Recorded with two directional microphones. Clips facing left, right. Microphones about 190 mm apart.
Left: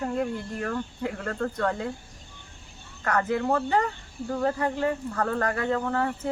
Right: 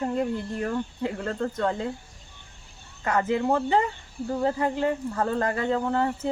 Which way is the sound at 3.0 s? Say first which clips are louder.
Right 1 dB; 15° right (ahead or behind).